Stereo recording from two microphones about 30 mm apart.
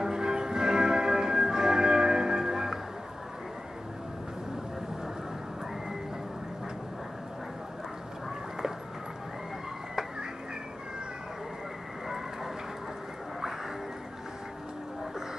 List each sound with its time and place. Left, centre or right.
0.0 s music: right